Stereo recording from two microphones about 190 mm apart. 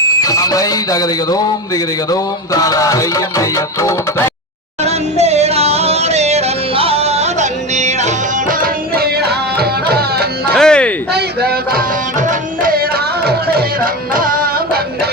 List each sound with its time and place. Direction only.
0.2 s speech: 20° left (ahead or behind)
4.8 s yodeling: 35° right (ahead or behind); by 10.2 s 55° right (ahead or behind)
10.5 s music: 5° left (ahead or behind)
11.1 s music: 60° right (ahead or behind)